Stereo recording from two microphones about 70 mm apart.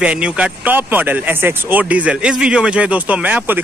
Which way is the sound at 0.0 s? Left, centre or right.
Centre.